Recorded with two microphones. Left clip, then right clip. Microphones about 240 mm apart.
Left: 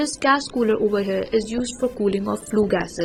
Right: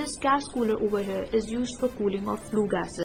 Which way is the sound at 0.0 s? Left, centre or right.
Left.